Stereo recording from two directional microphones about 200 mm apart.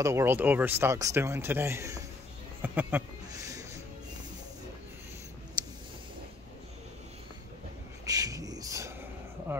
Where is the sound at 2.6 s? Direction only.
10° right (ahead or behind).